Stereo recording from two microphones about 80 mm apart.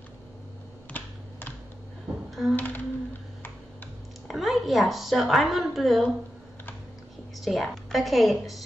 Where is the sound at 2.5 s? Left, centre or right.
Left.